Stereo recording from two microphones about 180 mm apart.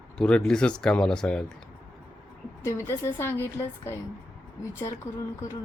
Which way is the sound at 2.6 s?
15° left (ahead or behind).